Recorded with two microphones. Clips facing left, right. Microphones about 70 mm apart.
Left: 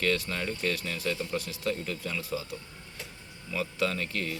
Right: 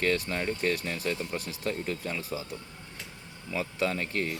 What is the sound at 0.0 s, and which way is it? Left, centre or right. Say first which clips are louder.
Speech: right 1 dB; right.